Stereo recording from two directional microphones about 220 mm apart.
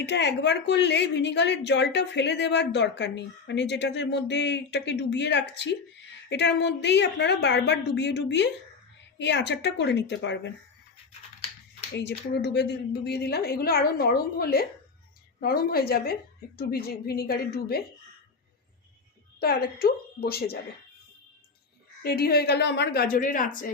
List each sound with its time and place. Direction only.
0.0 s a woman's voice: 50° left (ahead or behind)
11.9 s a woman's voice: 50° left (ahead or behind)
19.4 s a woman's voice: 45° left (ahead or behind)
22.0 s a woman's voice: 45° left (ahead or behind)